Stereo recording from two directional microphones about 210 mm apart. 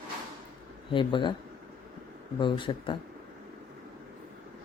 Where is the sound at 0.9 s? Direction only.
20° left (ahead or behind).